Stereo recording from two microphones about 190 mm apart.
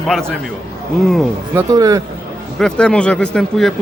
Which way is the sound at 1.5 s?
20° right (ahead or behind).